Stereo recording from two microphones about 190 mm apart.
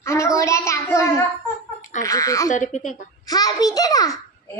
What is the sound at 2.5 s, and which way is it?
Speech, 40° left (ahead or behind).